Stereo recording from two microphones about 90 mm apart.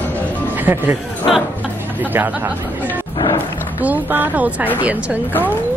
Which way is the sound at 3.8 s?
20° right (ahead or behind).